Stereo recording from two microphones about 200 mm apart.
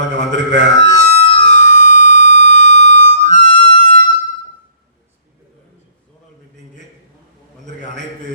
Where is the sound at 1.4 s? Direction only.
40° left (ahead or behind).